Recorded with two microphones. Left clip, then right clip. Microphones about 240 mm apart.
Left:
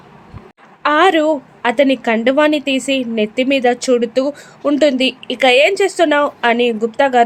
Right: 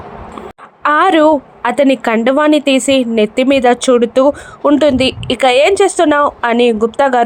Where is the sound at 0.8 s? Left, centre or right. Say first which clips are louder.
Right 3 dB; centre.